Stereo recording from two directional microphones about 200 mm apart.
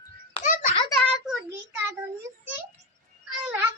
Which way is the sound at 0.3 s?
40° left (ahead or behind).